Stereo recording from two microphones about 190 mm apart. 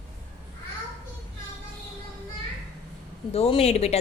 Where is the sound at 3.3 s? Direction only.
30° left (ahead or behind).